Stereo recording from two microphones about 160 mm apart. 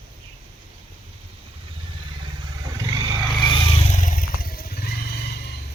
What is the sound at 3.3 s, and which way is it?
Vehicle, 30° left (ahead or behind).